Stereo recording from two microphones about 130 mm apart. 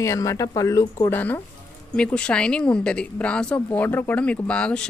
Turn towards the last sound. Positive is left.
turn(degrees=10)  # may be behind; listen again after turning